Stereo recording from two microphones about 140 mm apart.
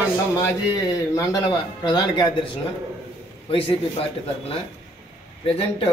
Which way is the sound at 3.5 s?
40° left (ahead or behind).